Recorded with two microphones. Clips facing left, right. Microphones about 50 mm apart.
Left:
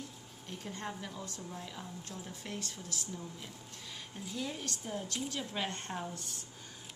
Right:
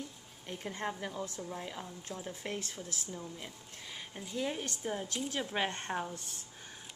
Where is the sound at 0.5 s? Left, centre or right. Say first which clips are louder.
Right 4 dB; right.